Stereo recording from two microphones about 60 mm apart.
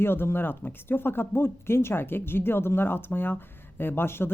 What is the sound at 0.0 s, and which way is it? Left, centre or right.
Speech, left.